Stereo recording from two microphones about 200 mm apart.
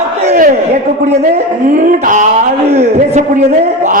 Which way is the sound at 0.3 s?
40° right (ahead or behind).